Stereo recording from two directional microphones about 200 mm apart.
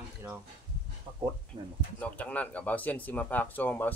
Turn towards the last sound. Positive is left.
turn(degrees=10)  # may be behind; listen again after turning